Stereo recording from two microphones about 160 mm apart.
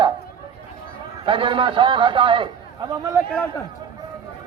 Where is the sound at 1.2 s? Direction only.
30° right (ahead or behind).